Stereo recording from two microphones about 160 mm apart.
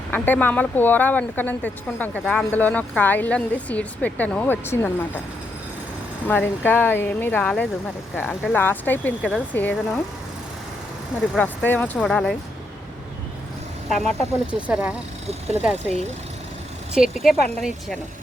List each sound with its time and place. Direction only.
0.1 s speech: 10° left (ahead or behind)
6.2 s speech: 10° left (ahead or behind)
11.3 s speech: 10° left (ahead or behind)
13.9 s speech: centre (ahead or behind)
15.3 s speech: 40° right (ahead or behind)
16.9 s speech: 5° right (ahead or behind)